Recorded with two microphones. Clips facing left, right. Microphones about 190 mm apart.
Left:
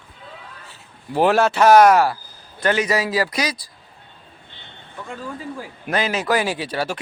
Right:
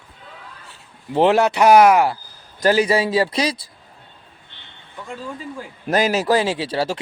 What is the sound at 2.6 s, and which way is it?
A man's voice, 35° right (ahead or behind).